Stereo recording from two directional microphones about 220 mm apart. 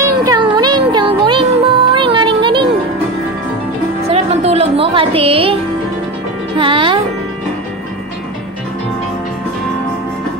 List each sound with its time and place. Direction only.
0.0 s music: 15° right (ahead or behind)
4.1 s music: 30° right (ahead or behind)